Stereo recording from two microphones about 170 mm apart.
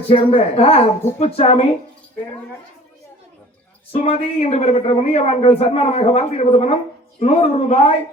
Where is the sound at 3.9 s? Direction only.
35° left (ahead or behind).